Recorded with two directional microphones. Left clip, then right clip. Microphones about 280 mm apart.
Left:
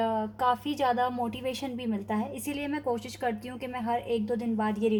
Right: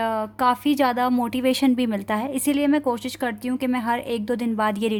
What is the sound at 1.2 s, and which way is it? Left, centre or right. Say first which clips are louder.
Speech: right 11 dB; right.